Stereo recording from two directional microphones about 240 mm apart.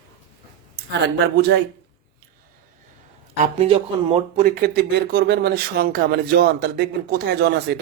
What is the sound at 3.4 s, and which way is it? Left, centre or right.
Speech, right.